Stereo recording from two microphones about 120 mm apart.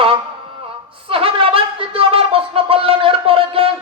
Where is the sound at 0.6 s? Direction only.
50° right (ahead or behind).